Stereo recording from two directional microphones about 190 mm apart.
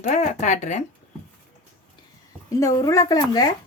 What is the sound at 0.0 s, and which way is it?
Speech, 40° left (ahead or behind).